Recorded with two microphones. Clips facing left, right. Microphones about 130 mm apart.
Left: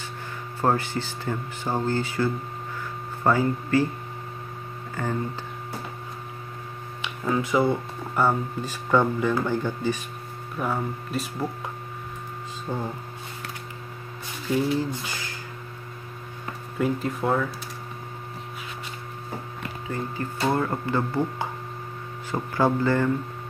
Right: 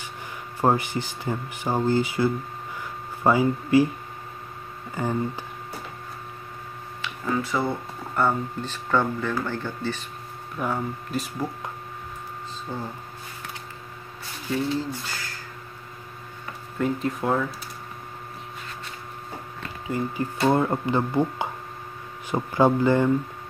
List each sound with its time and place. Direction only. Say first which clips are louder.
0.6 s speech: right 2 dB; 15° right (ahead or behind)
5.0 s speech: right 2 dB; 15° right (ahead or behind)
7.0 s a sound: left 1 dB; 15° left (ahead or behind)
8.2 s speech: left 1 dB; 10° left (ahead or behind)
10.6 s speech: even; centre (ahead or behind)
12.7 s speech: left 3 dB; 15° left (ahead or behind)
14.8 s speech: left 2 dB; 15° left (ahead or behind)
16.7 s speech: even; 5° left (ahead or behind)
19.9 s speech: right 4 dB; 15° right (ahead or behind)